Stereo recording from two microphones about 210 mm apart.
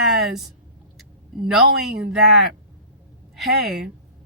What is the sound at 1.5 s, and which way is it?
Speech, centre (ahead or behind).